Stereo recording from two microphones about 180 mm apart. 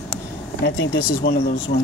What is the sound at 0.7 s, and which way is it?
Speech, 70° left (ahead or behind).